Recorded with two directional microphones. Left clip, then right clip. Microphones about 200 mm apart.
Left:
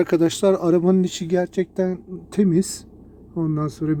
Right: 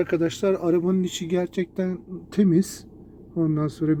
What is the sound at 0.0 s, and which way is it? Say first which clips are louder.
Speech: left 5 dB; 25° left (ahead or behind).